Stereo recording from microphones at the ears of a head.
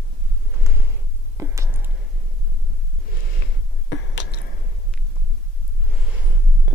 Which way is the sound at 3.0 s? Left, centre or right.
Left.